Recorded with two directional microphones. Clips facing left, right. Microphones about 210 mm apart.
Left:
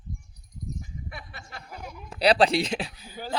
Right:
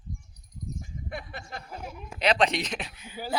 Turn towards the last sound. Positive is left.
turn(degrees=35)  # may be behind; listen again after turning